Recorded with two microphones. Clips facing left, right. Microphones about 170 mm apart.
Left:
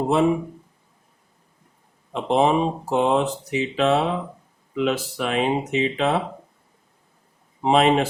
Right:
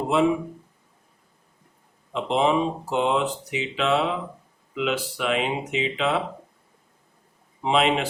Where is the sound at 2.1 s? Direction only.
45° left (ahead or behind).